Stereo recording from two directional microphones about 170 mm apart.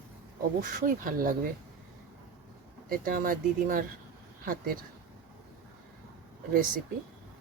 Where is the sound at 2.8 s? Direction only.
55° right (ahead or behind).